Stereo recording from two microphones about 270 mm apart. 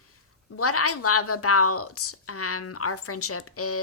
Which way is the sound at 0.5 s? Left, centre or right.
Left.